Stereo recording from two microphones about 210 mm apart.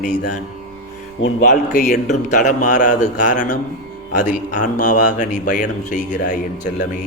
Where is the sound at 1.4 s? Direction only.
40° left (ahead or behind).